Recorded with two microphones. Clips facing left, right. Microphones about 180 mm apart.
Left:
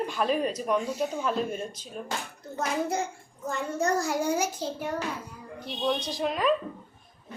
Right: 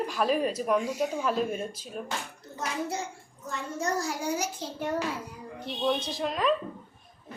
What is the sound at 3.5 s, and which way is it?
Speech, 50° left (ahead or behind).